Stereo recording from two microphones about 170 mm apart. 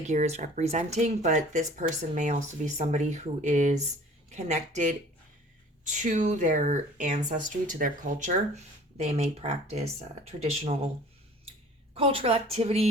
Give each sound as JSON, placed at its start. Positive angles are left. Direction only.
{"t": 0.0, "sound": "a woman's voice", "side_deg": -45}
{"t": 11.9, "sound": "a woman's voice", "side_deg": -35}